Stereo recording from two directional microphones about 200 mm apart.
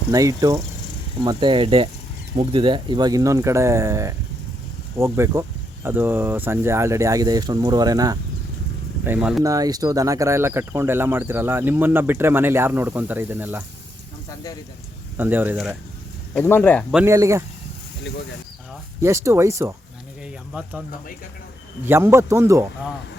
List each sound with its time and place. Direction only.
0.1 s speech: 15° right (ahead or behind)
9.0 s speech: 5° right (ahead or behind)
9.4 s speech: 15° right (ahead or behind)
15.2 s speech: 10° right (ahead or behind)
16.3 s speech: 10° left (ahead or behind)
16.9 s speech: 10° right (ahead or behind)
19.0 s speech: 15° right (ahead or behind)
21.8 s speech: 10° right (ahead or behind)